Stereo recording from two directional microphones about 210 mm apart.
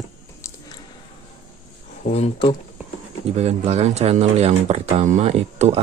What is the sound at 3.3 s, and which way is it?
Speech, 30° right (ahead or behind).